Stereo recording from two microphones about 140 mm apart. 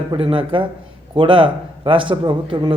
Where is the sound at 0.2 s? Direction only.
40° right (ahead or behind).